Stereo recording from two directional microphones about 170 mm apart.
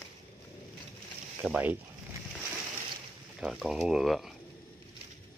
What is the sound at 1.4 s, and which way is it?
Speech, 10° right (ahead or behind).